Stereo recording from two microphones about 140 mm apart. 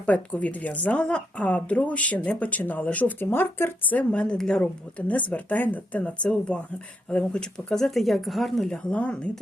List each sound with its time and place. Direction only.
0.0 s a woman's voice: 10° left (ahead or behind)